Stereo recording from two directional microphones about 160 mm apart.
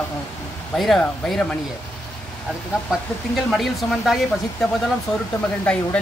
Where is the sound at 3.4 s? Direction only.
Centre (ahead or behind).